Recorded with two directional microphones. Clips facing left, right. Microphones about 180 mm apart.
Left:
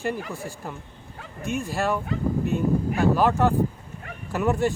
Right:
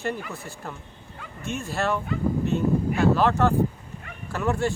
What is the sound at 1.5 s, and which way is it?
Speech, 15° left (ahead or behind).